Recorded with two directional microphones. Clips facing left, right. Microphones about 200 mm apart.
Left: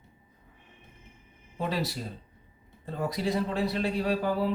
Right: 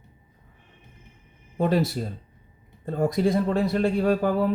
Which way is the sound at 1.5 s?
50° right (ahead or behind).